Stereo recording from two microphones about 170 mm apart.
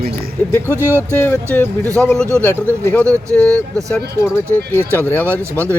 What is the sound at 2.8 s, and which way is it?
Speech, 10° left (ahead or behind).